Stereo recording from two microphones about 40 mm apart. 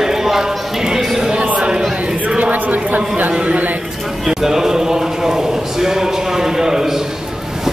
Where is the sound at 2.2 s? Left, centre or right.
Right.